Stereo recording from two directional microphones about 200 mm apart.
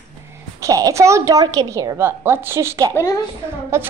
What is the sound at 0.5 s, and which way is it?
A woman's voice, 15° right (ahead or behind).